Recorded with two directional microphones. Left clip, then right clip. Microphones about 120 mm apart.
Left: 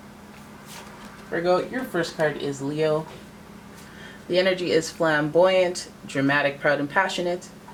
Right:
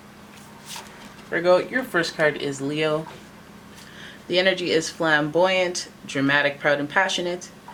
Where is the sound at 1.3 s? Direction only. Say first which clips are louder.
Right 4 dB; 35° right (ahead or behind).